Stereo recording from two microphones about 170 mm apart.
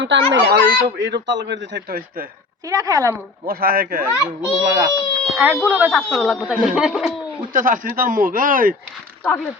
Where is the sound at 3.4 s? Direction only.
60° right (ahead or behind).